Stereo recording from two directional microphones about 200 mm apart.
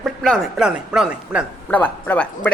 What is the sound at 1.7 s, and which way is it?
Speech, 5° left (ahead or behind).